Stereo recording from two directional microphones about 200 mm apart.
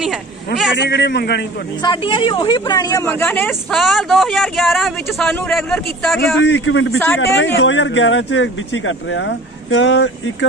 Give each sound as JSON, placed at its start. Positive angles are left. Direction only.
{"t": 0.9, "sound": "a man's voice", "side_deg": 55}
{"t": 1.8, "sound": "speech", "side_deg": 25}
{"t": 6.4, "sound": "a man's voice", "side_deg": 65}